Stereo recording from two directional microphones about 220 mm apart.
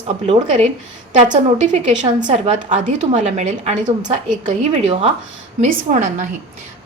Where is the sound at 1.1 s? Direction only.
35° right (ahead or behind).